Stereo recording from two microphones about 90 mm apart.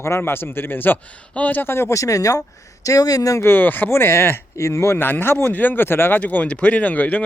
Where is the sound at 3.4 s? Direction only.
25° left (ahead or behind).